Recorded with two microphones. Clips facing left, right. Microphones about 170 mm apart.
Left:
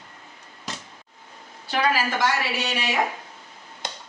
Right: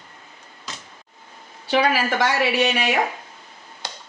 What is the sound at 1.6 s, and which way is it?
A woman's voice, 70° right (ahead or behind).